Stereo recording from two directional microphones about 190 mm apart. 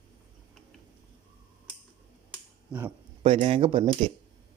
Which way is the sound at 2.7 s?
5° right (ahead or behind).